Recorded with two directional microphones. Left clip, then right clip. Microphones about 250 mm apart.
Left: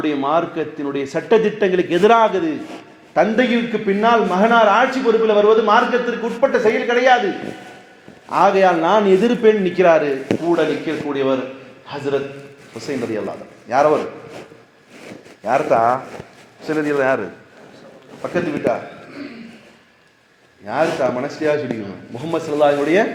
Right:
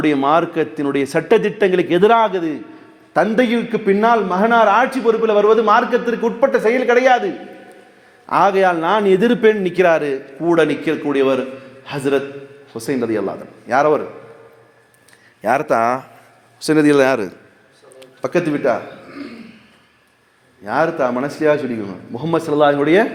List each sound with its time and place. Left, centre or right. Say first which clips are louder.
0.0 s a man's voice: right 3 dB; right
8.3 s a man's voice: even; right
15.4 s a man's voice: even; right
20.7 s a man's voice: right 1 dB; right